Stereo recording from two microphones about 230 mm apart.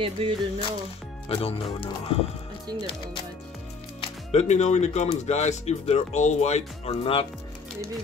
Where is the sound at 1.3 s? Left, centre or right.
Left.